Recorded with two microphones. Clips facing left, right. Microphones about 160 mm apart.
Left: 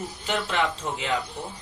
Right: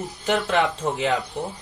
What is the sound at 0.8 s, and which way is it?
Speech, 50° right (ahead or behind).